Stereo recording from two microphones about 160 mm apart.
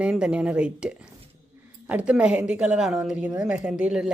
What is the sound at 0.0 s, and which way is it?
A woman's voice, 5° right (ahead or behind).